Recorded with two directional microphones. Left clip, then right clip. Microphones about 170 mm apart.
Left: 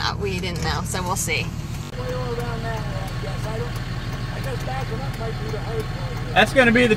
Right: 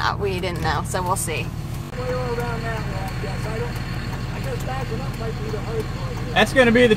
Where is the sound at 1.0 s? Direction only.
5° right (ahead or behind).